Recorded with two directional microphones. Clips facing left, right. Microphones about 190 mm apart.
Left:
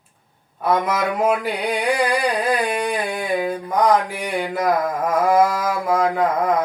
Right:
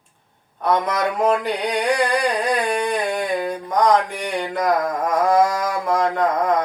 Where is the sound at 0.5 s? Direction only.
5° left (ahead or behind).